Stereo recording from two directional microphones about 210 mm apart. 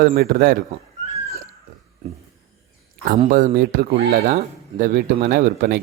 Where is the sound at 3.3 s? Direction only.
40° right (ahead or behind).